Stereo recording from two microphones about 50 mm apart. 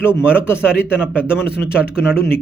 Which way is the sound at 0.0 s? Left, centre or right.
Right.